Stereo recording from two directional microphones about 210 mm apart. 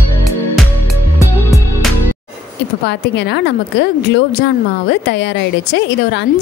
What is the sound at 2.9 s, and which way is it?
Speech, 55° left (ahead or behind).